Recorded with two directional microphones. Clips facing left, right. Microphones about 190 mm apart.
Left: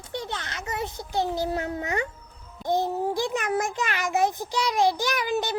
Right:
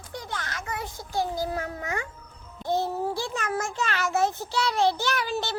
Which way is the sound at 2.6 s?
15° left (ahead or behind).